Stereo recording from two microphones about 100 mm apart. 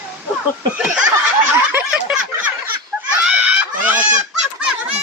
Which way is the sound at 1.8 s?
10° right (ahead or behind).